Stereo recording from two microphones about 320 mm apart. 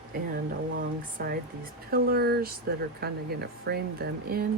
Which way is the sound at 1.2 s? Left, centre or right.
Right.